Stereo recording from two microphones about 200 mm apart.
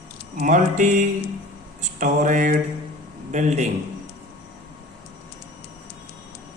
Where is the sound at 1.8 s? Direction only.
40° right (ahead or behind).